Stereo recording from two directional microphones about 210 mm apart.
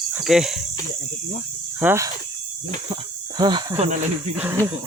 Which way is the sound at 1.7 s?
10° right (ahead or behind).